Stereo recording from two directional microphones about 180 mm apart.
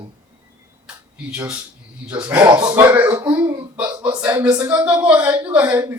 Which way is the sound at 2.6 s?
25° right (ahead or behind).